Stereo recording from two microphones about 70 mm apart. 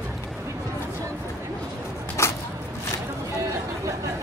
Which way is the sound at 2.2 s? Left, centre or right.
Left.